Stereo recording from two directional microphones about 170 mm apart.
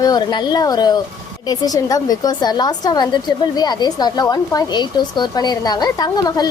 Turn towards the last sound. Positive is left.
turn(degrees=25)  # may be behind; listen again after turning